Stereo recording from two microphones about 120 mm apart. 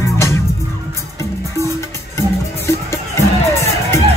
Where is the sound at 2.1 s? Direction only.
25° left (ahead or behind).